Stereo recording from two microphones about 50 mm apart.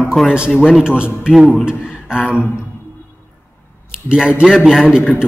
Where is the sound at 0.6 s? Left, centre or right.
Centre.